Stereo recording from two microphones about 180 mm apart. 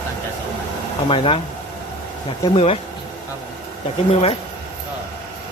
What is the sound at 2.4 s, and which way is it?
Speech, 30° left (ahead or behind).